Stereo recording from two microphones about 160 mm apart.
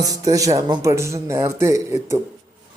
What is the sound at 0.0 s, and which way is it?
A man's voice, 20° right (ahead or behind).